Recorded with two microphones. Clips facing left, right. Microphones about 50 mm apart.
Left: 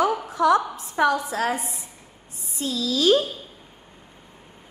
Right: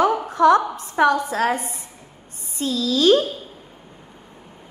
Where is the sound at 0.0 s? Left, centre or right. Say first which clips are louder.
Right 5 dB; right.